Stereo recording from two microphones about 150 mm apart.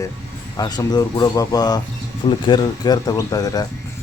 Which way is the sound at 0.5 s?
25° left (ahead or behind).